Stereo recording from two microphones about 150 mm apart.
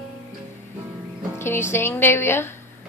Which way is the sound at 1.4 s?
15° left (ahead or behind).